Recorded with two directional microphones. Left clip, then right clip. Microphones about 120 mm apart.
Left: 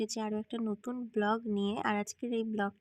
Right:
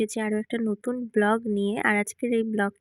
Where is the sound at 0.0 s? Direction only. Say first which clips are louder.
Right 9 dB; 40° right (ahead or behind).